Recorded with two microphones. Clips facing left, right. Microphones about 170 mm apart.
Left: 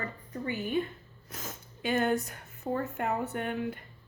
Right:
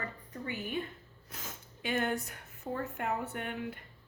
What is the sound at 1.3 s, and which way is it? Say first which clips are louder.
Speech: left 4 dB; 40° left (ahead or behind).